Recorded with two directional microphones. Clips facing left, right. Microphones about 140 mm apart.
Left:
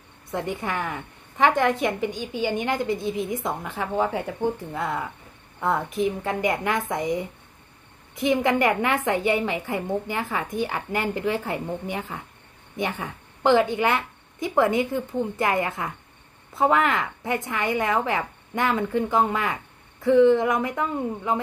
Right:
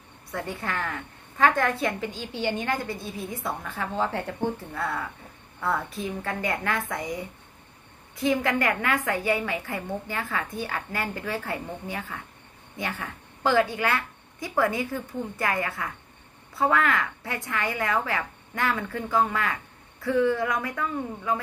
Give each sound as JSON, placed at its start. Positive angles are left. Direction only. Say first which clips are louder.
{"t": 0.3, "sound": "a woman's voice", "louder": "left 4 dB", "side_deg": 20}